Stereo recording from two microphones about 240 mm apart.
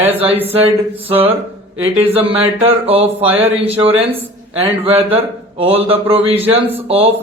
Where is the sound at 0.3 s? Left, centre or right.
Centre.